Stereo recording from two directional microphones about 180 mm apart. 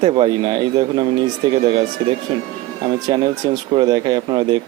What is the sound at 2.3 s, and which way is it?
A man's voice, 25° right (ahead or behind).